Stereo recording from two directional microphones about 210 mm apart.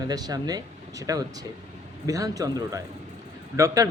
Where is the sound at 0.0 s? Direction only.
20° right (ahead or behind).